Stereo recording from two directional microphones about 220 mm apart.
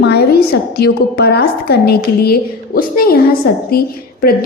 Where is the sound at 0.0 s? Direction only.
45° left (ahead or behind).